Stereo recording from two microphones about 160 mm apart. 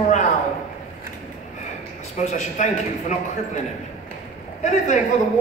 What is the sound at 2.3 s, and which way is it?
Speech, 45° left (ahead or behind).